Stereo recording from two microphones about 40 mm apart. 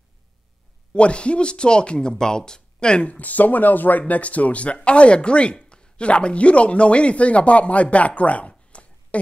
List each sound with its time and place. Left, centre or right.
0.9 s speech: left
3.1 s speech: left